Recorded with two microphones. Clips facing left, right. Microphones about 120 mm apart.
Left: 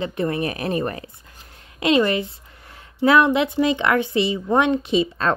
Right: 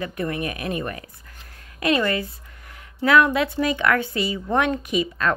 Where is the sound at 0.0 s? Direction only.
25° left (ahead or behind).